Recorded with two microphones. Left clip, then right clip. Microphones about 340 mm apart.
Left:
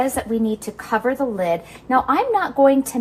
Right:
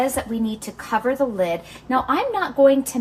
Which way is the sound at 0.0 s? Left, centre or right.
Centre.